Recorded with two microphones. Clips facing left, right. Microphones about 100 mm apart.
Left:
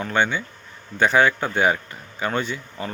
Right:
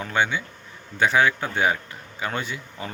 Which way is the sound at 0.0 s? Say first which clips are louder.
Left 2 dB; 5° right (ahead or behind).